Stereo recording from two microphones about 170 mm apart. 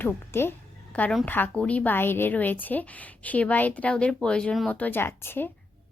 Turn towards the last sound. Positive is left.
turn(degrees=15)  # may be behind; listen again after turning